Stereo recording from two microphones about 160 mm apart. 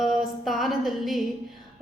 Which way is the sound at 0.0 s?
Centre (ahead or behind).